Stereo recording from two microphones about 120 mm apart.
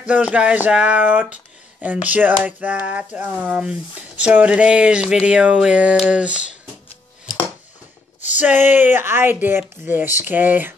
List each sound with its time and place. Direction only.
0.0 s speech: 10° right (ahead or behind)
8.4 s speech: 15° right (ahead or behind)